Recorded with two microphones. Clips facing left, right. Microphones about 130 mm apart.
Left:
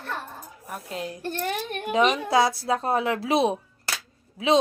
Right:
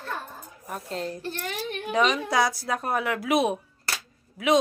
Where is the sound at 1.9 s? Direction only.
25° left (ahead or behind).